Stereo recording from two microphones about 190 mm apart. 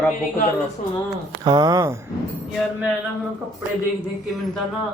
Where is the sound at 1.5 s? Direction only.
20° right (ahead or behind).